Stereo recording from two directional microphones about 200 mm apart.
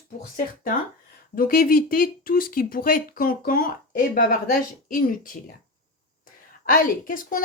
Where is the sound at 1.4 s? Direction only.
45° left (ahead or behind).